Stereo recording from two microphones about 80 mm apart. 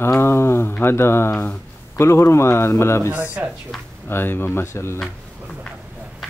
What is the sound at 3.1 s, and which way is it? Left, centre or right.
Speech, centre.